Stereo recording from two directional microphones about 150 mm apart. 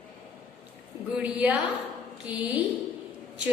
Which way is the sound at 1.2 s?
10° right (ahead or behind).